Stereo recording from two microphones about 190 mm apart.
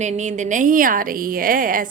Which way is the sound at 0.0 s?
40° right (ahead or behind).